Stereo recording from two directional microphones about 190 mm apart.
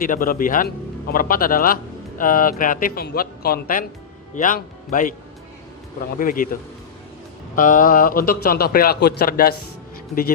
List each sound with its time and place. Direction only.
0.0 s speech: 45° left (ahead or behind)
6.1 s speech: 45° left (ahead or behind)